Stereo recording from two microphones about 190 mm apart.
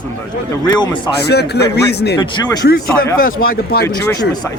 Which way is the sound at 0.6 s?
20° left (ahead or behind).